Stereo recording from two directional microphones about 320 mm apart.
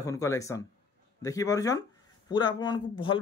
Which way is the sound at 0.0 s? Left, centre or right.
Centre.